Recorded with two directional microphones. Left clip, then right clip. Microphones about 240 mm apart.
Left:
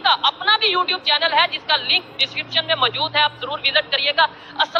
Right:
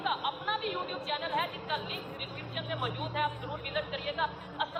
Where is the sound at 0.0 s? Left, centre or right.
Left.